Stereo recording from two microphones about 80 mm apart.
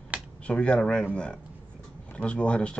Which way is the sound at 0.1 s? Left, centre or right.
Centre.